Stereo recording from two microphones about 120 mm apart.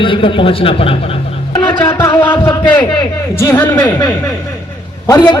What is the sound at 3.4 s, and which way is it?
Speech, 20° left (ahead or behind).